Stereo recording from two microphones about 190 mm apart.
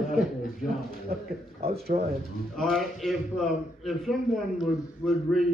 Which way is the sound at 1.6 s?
55° right (ahead or behind).